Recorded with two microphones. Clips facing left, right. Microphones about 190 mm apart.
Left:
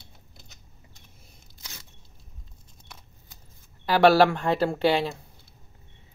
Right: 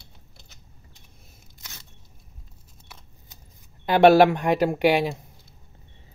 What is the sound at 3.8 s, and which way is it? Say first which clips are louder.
Speech: right 3 dB; 20° right (ahead or behind).